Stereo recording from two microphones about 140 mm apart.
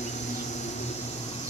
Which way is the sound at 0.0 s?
55° left (ahead or behind).